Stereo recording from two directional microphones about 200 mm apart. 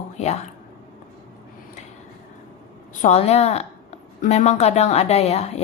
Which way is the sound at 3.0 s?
35° left (ahead or behind).